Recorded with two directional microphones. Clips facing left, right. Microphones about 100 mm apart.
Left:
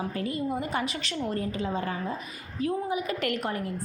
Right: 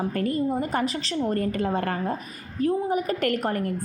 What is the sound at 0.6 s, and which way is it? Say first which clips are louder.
Speech: right 4 dB; 40° right (ahead or behind).